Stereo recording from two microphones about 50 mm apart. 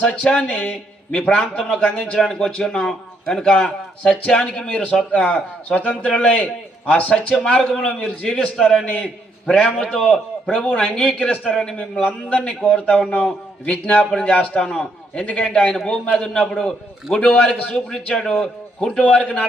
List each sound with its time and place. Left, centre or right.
0.0 s a man's voice: left
2.1 s a man's voice: centre
12.6 s a man's voice: left
14.3 s a man's voice: left
14.6 s a man's voice: centre
15.1 s a man's voice: left
15.4 s a man's voice: centre
18.9 s a man's voice: left